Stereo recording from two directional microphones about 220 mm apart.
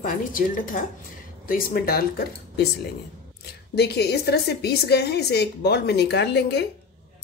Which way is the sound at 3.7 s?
45° left (ahead or behind).